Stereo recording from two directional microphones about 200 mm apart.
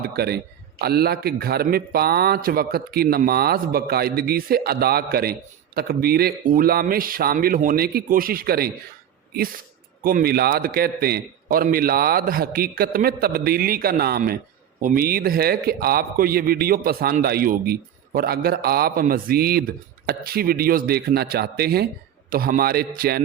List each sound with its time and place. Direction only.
0.0 s a man's voice: 50° right (ahead or behind)